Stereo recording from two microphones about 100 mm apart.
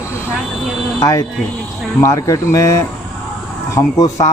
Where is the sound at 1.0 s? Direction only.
35° left (ahead or behind).